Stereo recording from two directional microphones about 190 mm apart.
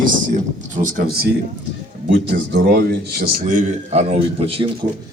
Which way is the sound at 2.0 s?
70° right (ahead or behind).